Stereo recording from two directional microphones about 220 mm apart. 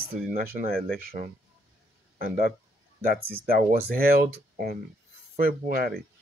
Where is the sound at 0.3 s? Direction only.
40° right (ahead or behind).